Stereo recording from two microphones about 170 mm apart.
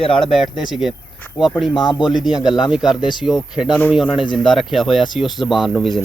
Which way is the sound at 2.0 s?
Centre (ahead or behind).